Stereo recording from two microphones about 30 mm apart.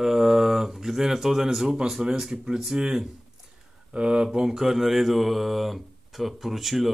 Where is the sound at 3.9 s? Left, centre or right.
Right.